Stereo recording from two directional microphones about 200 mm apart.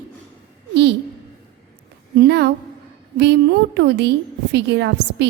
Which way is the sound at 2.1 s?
55° right (ahead or behind).